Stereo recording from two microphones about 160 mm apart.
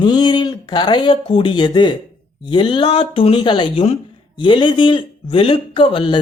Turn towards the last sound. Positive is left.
turn(degrees=30)  # may be behind; listen again after turning